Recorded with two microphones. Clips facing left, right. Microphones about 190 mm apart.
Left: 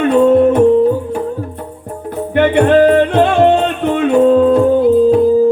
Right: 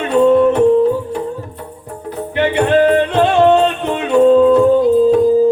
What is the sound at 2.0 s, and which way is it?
Music, 55° left (ahead or behind).